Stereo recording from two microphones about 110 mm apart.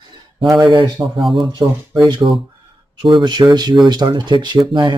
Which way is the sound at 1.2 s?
Centre (ahead or behind).